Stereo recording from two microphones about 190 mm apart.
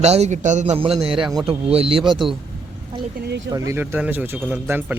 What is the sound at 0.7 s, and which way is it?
A man's voice, 30° right (ahead or behind).